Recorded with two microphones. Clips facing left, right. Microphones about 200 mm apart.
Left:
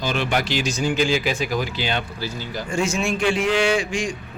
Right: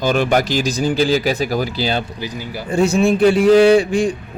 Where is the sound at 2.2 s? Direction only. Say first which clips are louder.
Right 2 dB; 15° right (ahead or behind).